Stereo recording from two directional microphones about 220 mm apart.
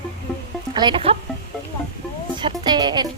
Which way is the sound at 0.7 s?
20° right (ahead or behind).